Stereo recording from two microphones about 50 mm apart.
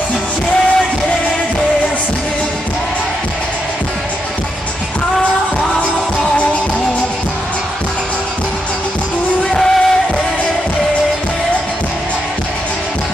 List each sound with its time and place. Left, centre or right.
9.5 s music: centre